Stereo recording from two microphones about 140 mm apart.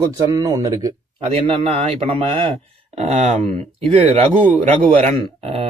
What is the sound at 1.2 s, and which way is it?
Speech, 40° right (ahead or behind).